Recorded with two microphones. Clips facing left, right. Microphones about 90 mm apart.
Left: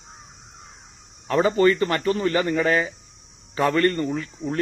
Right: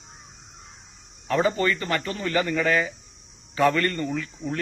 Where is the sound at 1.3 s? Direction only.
35° left (ahead or behind).